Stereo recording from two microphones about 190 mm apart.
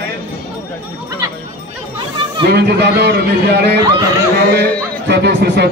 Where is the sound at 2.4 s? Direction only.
60° right (ahead or behind).